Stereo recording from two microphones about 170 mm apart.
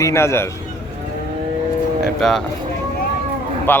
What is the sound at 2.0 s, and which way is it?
Music, centre (ahead or behind).